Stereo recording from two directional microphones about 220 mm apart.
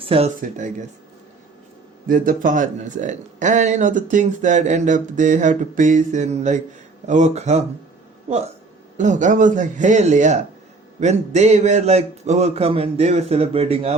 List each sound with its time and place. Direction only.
0.0 s speech: 25° right (ahead or behind)
2.0 s speech: 40° right (ahead or behind)
9.0 s a man's voice: 35° right (ahead or behind)